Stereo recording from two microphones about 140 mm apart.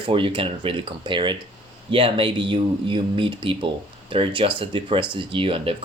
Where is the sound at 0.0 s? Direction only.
40° right (ahead or behind).